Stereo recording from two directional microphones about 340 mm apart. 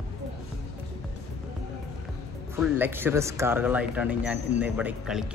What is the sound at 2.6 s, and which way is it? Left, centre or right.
Speech, centre.